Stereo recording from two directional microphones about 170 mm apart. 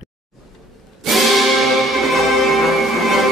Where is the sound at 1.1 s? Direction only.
Centre (ahead or behind).